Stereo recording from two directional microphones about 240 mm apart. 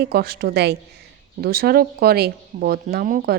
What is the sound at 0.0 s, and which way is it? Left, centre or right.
Speech, right.